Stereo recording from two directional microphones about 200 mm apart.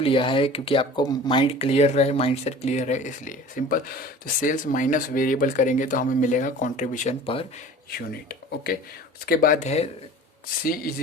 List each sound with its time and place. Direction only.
0.0 s speech: 25° left (ahead or behind)
7.9 s speech: 50° left (ahead or behind)
9.6 s speech: 30° left (ahead or behind)